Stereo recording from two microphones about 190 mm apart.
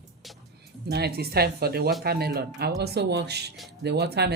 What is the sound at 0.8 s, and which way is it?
Speech, 55° right (ahead or behind).